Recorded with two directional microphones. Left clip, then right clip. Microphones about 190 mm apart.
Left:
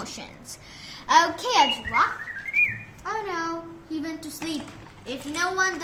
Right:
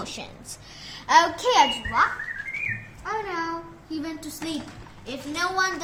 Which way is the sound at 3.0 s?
Centre (ahead or behind).